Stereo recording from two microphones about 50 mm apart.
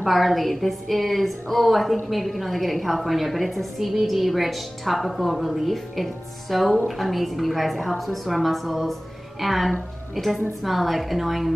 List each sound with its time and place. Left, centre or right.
0.0 s a woman's voice: centre